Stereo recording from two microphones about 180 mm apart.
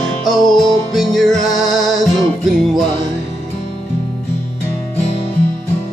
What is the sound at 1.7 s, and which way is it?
Music, centre (ahead or behind).